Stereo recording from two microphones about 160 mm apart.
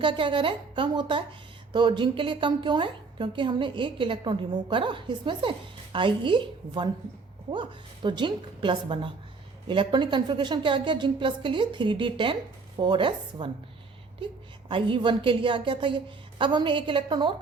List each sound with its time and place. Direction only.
0.0 s a woman's voice: 30° right (ahead or behind)
14.7 s a woman's voice: 30° right (ahead or behind)